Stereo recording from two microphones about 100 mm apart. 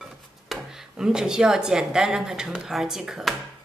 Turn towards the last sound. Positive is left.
turn(degrees=-5)  # may be behind; listen again after turning